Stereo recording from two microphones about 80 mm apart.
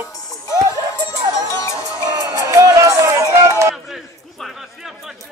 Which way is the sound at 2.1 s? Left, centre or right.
Right.